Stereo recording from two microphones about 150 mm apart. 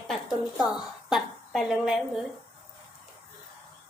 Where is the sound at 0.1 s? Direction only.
Centre (ahead or behind).